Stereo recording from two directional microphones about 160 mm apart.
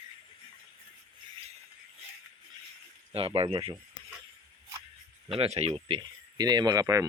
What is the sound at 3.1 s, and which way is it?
Speech, 35° right (ahead or behind).